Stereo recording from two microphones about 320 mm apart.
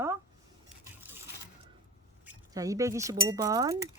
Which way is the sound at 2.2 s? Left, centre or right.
Centre.